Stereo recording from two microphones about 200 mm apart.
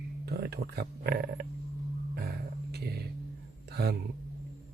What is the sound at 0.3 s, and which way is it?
Speech, 50° right (ahead or behind).